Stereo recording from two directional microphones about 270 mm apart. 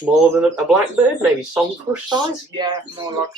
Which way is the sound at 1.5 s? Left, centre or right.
Centre.